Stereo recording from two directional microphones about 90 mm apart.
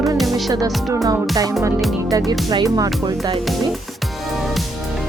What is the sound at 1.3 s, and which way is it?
Speech, 40° right (ahead or behind).